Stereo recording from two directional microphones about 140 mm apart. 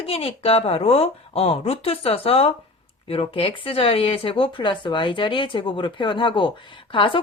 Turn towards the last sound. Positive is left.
turn(degrees=40)  # may be behind; listen again after turning